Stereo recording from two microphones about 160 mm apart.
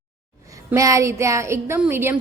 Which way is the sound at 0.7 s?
20° right (ahead or behind).